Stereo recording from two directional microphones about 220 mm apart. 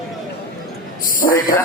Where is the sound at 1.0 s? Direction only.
40° left (ahead or behind).